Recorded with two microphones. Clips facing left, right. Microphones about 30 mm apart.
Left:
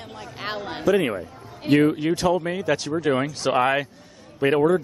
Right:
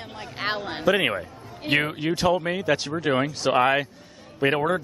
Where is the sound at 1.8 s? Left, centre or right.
Centre.